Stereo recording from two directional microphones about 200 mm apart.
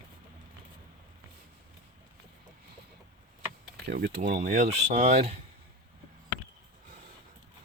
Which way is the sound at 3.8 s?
50° right (ahead or behind).